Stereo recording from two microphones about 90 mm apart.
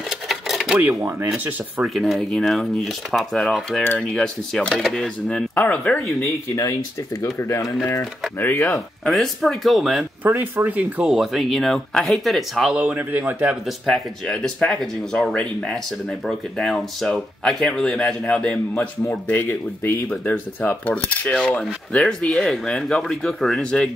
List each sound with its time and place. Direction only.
0.3 s cash register: centre (ahead or behind)
0.7 s speech: 20° right (ahead or behind)
2.0 s speech: 5° left (ahead or behind)
5.5 s speech: 20° left (ahead or behind)
6.2 s speech: 40° left (ahead or behind)
8.4 s speech: 25° left (ahead or behind)
9.0 s speech: centre (ahead or behind)
10.2 s speech: 20° right (ahead or behind)
11.1 s speech: centre (ahead or behind)
12.7 s speech: 15° right (ahead or behind)
13.5 s speech: centre (ahead or behind)
19.0 s speech: 25° left (ahead or behind)